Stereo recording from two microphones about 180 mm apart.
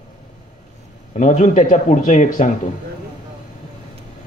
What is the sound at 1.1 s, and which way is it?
Speech, 40° left (ahead or behind).